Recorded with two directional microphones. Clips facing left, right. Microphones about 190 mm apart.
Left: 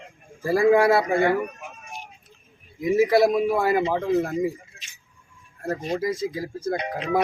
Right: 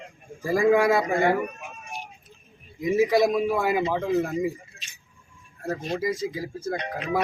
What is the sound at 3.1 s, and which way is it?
Speech, 15° right (ahead or behind).